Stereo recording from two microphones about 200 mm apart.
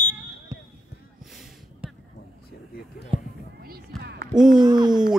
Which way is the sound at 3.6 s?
50° right (ahead or behind).